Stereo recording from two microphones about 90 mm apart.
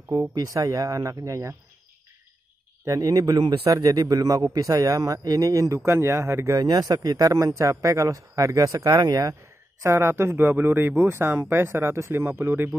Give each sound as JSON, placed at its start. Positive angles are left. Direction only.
{"t": 0.1, "sound": "a man's voice", "side_deg": -40}
{"t": 2.8, "sound": "a man's voice", "side_deg": -35}
{"t": 6.6, "sound": "a man's voice", "side_deg": -45}
{"t": 9.8, "sound": "speech", "side_deg": -30}